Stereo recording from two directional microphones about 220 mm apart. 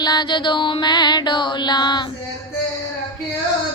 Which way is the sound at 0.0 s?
20° left (ahead or behind).